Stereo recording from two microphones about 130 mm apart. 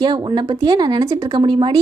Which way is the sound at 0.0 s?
35° right (ahead or behind).